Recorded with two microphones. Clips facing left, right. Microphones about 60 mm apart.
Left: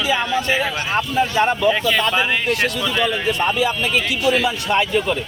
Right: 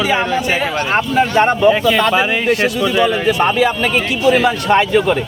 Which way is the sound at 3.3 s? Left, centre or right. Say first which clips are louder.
Right 5 dB; right.